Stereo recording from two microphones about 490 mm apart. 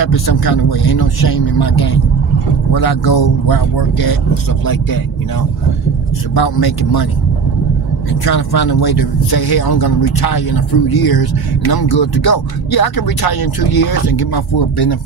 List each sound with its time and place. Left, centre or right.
0.0 s speech: left
6.3 s speech: left
8.1 s speech: left